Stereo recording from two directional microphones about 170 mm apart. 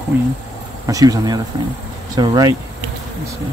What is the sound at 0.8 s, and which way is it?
Speech, 20° right (ahead or behind).